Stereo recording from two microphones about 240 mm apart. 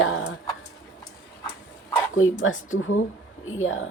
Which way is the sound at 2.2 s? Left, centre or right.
Left.